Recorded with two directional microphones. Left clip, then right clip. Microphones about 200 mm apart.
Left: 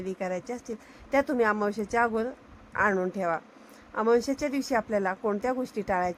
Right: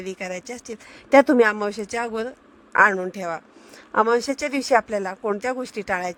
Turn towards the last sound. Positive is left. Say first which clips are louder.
# right 2 dB
turn(degrees=-45)  # may be behind; listen again after turning